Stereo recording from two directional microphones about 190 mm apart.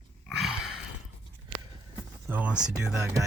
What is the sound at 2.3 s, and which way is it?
Speech, 5° right (ahead or behind).